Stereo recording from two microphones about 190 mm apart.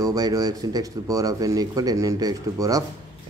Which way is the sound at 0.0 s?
20° right (ahead or behind).